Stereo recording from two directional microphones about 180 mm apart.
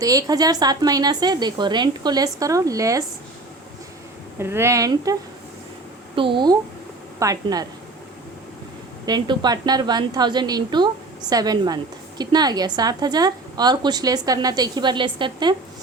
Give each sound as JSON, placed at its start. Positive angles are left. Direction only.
{"t": 0.0, "sound": "a woman's voice", "side_deg": -20}
{"t": 4.4, "sound": "speech", "side_deg": -15}
{"t": 6.1, "sound": "a woman's voice", "side_deg": -30}
{"t": 9.0, "sound": "a woman's voice", "side_deg": -25}